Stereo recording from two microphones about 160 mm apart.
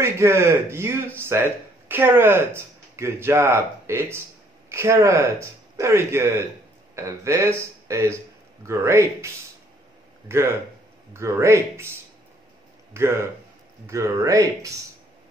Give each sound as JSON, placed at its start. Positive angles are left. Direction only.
{"t": 0.0, "sound": "speech", "side_deg": -15}
{"t": 12.9, "sound": "speech", "side_deg": -15}